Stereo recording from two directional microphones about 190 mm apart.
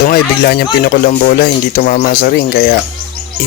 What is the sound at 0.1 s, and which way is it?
Speech, 55° left (ahead or behind).